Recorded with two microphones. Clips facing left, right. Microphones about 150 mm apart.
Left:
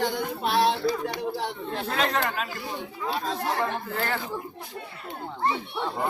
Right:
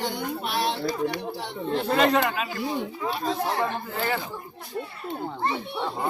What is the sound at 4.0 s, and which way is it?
Speech, 5° right (ahead or behind).